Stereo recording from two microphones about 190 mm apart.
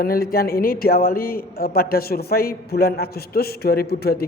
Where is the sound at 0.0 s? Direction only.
50° left (ahead or behind).